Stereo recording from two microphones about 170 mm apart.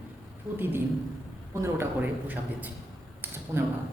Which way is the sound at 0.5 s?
10° right (ahead or behind).